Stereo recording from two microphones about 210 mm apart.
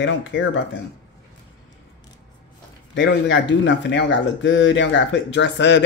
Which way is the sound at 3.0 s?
60° left (ahead or behind).